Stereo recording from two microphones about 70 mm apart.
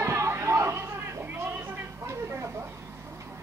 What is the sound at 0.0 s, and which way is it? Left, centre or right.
Music, right.